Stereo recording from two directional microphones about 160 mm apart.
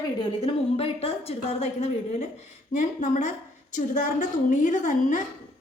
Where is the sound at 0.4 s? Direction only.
35° left (ahead or behind).